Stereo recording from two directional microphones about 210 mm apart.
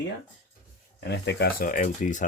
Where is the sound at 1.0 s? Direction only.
50° left (ahead or behind); by 2.3 s 35° left (ahead or behind).